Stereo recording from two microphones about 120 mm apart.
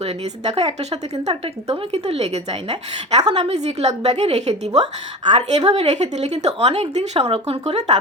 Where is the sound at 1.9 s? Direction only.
60° right (ahead or behind).